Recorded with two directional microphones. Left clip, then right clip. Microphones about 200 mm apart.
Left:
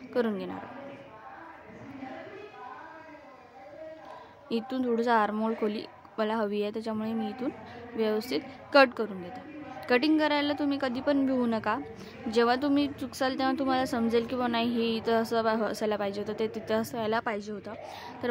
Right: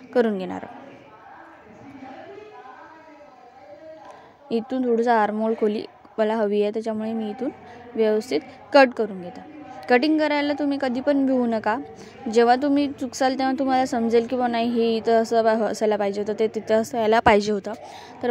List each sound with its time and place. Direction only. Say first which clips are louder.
0.1 s speech: right 8 dB; 30° right (ahead or behind)
4.5 s a woman's voice: right 7 dB; 20° right (ahead or behind)
17.2 s speech: right 16 dB; 40° right (ahead or behind)
18.2 s a woman's voice: right 7 dB; 20° right (ahead or behind)